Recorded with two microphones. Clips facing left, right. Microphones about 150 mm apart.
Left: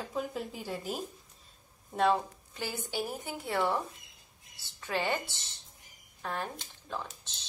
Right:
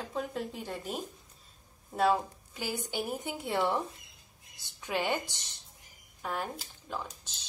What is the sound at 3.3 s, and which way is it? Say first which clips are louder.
Speech: even; 25° right (ahead or behind).